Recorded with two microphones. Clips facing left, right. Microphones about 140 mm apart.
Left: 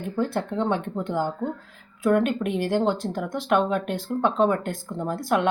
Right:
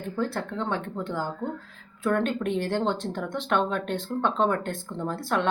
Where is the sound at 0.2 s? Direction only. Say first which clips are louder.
Left 4 dB; 20° left (ahead or behind).